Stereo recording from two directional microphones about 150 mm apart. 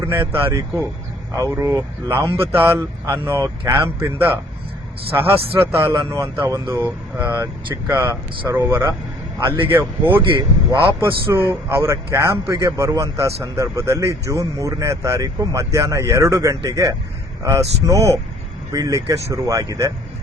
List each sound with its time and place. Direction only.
0.0 s speech: 15° right (ahead or behind)
11.3 s speech: 15° right (ahead or behind)